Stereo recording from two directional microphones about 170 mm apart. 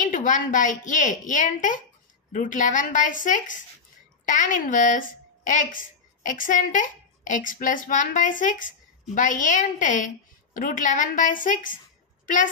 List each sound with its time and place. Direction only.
0.0 s a woman's voice: 50° left (ahead or behind)